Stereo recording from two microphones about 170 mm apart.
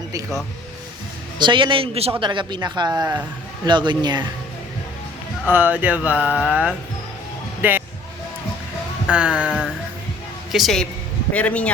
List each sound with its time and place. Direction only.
1.4 s a man's voice: 30° right (ahead or behind)
5.5 s speech: 10° right (ahead or behind)
6.4 s music: 5° right (ahead or behind)
9.0 s speech: 10° right (ahead or behind)
10.5 s music: centre (ahead or behind)
11.3 s speech: 10° left (ahead or behind)